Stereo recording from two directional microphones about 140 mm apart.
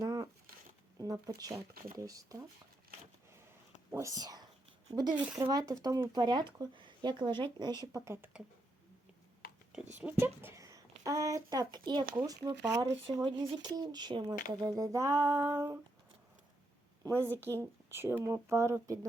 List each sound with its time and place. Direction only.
0.0 s a sound: 30° right (ahead or behind)
0.9 s speech: 25° right (ahead or behind)
3.9 s speech: 25° right (ahead or behind)
5.1 s speech: 10° right (ahead or behind)
5.4 s speech: 25° right (ahead or behind)
10.0 s a woman's voice: 10° right (ahead or behind)
17.0 s speech: 20° right (ahead or behind)